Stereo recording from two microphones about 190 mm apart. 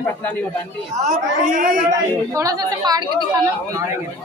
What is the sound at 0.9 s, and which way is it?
Speech, 40° right (ahead or behind).